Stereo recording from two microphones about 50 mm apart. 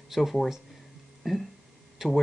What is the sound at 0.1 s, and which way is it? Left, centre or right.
Speech, centre.